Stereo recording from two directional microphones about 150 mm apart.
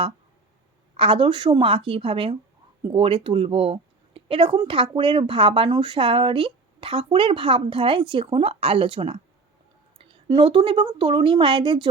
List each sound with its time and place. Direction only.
0.9 s speech: 35° right (ahead or behind)
10.2 s speech: 35° right (ahead or behind)